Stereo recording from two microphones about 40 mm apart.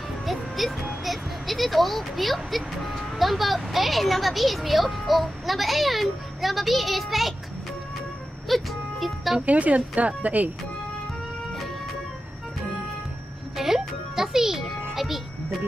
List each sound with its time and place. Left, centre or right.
0.2 s music: centre
3.0 s speech: centre
8.5 s speech: centre
9.5 s speech: right
13.6 s music: centre